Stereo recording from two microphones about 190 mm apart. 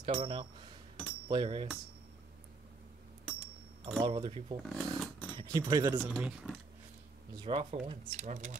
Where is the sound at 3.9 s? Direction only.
25° right (ahead or behind).